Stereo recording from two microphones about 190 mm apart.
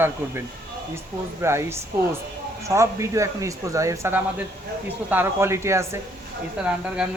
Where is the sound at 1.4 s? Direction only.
15° right (ahead or behind).